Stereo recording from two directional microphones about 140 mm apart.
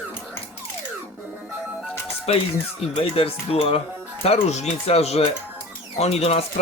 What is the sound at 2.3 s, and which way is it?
Speech, 45° left (ahead or behind).